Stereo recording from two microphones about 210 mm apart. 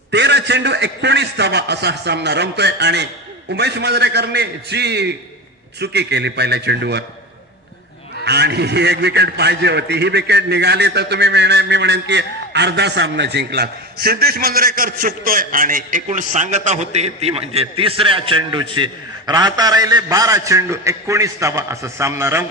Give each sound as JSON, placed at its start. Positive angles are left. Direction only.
{"t": 0.1, "sound": "a man's voice", "side_deg": -55}
{"t": 8.2, "sound": "a man's voice", "side_deg": -55}